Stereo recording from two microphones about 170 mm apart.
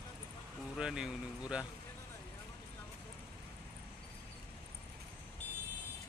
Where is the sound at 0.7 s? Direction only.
5° right (ahead or behind).